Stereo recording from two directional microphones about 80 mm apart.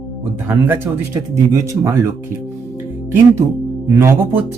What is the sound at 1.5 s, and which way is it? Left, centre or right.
Speech, right.